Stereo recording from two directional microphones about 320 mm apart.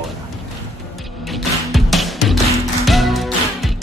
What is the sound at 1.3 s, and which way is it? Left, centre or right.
Music, centre.